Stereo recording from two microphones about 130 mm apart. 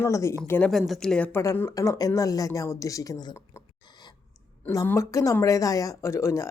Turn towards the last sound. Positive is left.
turn(degrees=20)  # may be behind; listen again after turning